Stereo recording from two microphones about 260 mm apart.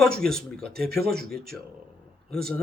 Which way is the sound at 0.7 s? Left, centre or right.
Right.